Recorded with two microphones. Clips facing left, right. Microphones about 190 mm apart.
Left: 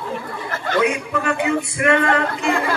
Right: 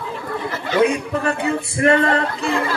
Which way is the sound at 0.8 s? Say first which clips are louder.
Right 4 dB; 35° right (ahead or behind).